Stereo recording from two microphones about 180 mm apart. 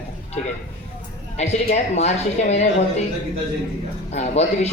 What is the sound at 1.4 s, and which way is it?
Speech, 40° left (ahead or behind).